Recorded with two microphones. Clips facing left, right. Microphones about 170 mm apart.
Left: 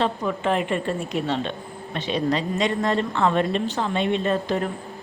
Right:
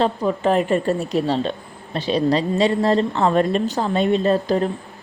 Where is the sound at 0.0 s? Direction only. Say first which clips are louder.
Right 4 dB; 35° right (ahead or behind).